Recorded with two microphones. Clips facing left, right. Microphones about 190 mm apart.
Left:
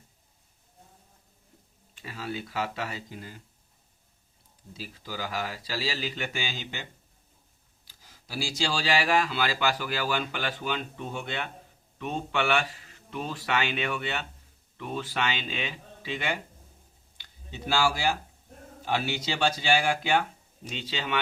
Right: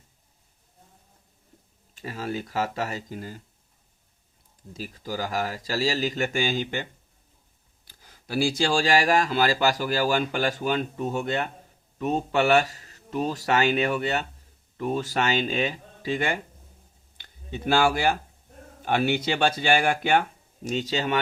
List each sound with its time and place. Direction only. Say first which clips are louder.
2.0 s speech: right 5 dB; 45° right (ahead or behind)
4.7 s speech: right 6 dB; 45° right (ahead or behind)
7.9 s speech: right 9 dB; 55° right (ahead or behind)
20.7 s speech: right 7 dB; 45° right (ahead or behind)